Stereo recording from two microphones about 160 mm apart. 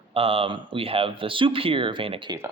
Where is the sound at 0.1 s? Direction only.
35° right (ahead or behind).